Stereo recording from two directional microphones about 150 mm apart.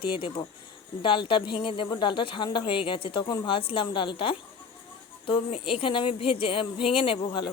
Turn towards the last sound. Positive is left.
turn(degrees=30)  # may be behind; listen again after turning